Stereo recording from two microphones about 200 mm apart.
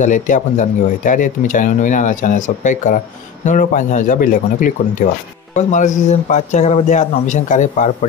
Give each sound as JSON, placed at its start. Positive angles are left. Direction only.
{"t": 0.0, "sound": "speech", "side_deg": 40}